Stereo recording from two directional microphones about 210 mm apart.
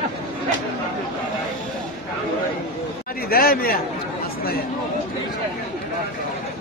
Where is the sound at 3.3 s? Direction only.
45° left (ahead or behind).